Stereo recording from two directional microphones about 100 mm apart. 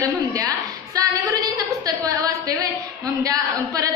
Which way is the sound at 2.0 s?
35° right (ahead or behind).